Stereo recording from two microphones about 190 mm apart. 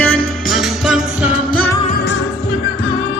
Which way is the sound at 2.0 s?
75° left (ahead or behind).